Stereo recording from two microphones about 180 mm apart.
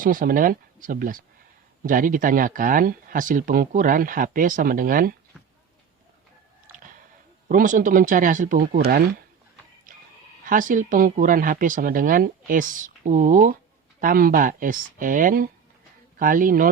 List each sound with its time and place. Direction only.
0.0 s speech: 50° right (ahead or behind)
7.4 s speech: 50° right (ahead or behind)
9.9 s a sound: 50° right (ahead or behind)
10.4 s speech: 50° right (ahead or behind)